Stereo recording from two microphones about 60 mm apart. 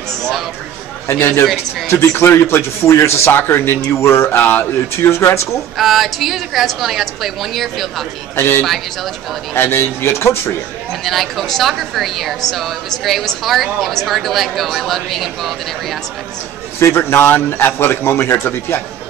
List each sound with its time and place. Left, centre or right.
1.9 s a man's voice: left
3.3 s a man's voice: left
4.4 s a man's voice: left
4.9 s a man's voice: left
5.8 s a woman's voice: centre
8.4 s a man's voice: left
8.6 s a woman's voice: centre
9.6 s a man's voice: left
11.1 s a woman's voice: centre
16.8 s a man's voice: left